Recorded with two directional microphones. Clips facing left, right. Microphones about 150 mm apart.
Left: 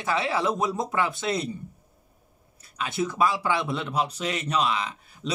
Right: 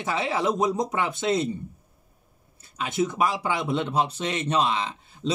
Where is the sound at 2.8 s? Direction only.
20° right (ahead or behind).